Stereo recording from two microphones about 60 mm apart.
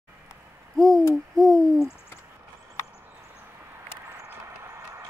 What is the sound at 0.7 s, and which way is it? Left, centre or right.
Owl, centre.